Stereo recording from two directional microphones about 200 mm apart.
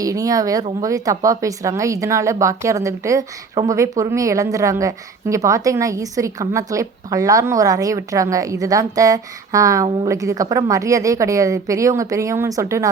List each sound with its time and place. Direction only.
0.0 s speech: 15° right (ahead or behind)